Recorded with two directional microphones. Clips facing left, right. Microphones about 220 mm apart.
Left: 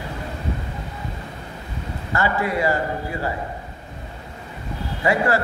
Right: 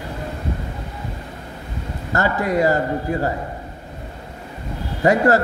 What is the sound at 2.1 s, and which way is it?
A man's voice, 40° right (ahead or behind).